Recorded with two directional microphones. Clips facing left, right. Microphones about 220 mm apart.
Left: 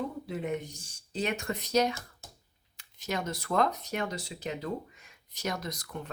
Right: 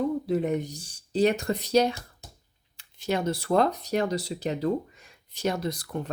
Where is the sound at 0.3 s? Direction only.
40° right (ahead or behind).